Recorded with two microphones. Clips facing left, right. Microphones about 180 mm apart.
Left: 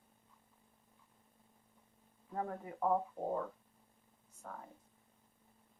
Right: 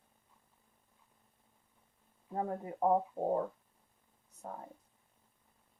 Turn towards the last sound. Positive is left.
turn(degrees=-30)  # may be behind; listen again after turning